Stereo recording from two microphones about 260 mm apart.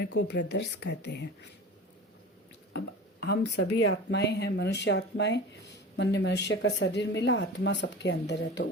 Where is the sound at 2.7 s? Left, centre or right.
Left.